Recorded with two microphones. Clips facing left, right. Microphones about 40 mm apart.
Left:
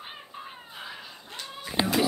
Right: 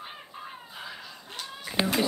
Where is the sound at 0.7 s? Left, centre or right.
Centre.